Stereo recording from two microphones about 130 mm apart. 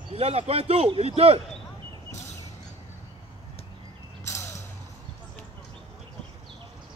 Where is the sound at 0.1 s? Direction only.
55° right (ahead or behind).